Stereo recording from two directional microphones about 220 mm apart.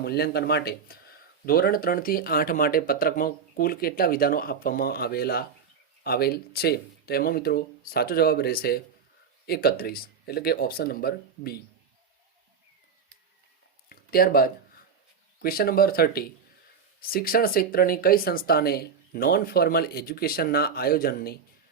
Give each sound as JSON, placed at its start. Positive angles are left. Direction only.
{"t": 0.0, "sound": "speech", "side_deg": 45}
{"t": 13.9, "sound": "a sound", "side_deg": 45}
{"t": 15.4, "sound": "speech", "side_deg": 45}